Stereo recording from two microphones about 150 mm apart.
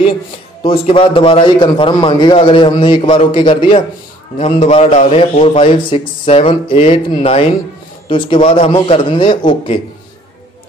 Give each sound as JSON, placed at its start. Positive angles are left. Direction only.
{"t": 0.7, "sound": "a man's voice", "side_deg": 35}
{"t": 4.4, "sound": "a man's voice", "side_deg": 45}